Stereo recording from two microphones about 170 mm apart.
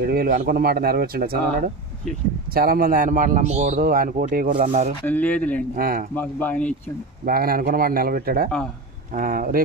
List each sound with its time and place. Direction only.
0.0 s speech: 65° right (ahead or behind)
2.5 s a man's voice: 60° right (ahead or behind)
5.0 s speech: 10° left (ahead or behind)
5.8 s speech: 60° right (ahead or behind)
6.1 s speech: 10° left (ahead or behind)
7.2 s speech: 60° right (ahead or behind)